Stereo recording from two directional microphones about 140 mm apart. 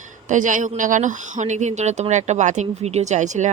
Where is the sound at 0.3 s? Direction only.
65° right (ahead or behind).